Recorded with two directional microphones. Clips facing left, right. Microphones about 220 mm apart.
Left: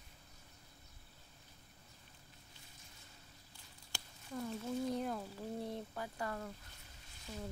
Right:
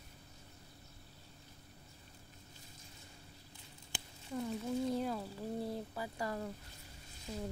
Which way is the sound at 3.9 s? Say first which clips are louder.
Right 3 dB; 15° right (ahead or behind).